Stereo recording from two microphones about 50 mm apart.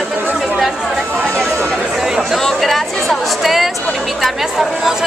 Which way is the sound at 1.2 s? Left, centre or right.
Centre.